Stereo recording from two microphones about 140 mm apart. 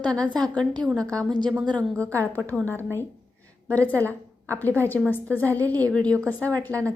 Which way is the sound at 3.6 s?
10° left (ahead or behind).